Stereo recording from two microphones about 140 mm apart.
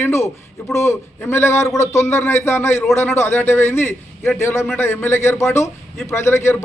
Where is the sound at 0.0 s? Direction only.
20° left (ahead or behind).